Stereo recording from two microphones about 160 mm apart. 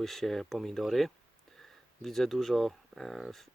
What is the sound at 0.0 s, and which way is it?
Speech, centre (ahead or behind).